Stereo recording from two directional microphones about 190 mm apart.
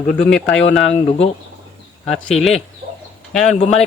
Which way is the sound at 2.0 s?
Centre (ahead or behind).